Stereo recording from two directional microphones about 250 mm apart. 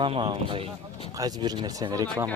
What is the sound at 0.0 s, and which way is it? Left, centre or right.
Speech, centre.